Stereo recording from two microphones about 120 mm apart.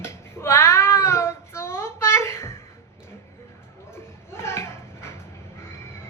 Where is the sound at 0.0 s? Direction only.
20° left (ahead or behind).